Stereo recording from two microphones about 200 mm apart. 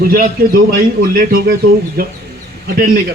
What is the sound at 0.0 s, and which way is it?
A man's voice, 50° right (ahead or behind).